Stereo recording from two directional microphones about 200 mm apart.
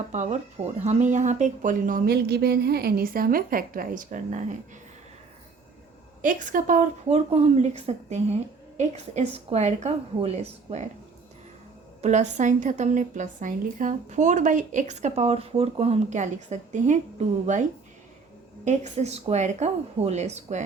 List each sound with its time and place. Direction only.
0.1 s speech: 35° right (ahead or behind)
6.2 s a woman's voice: 40° right (ahead or behind)
12.0 s a woman's voice: 35° right (ahead or behind)